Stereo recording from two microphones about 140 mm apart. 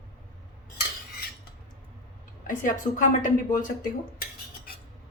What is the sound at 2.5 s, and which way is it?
A woman's voice, 70° left (ahead or behind).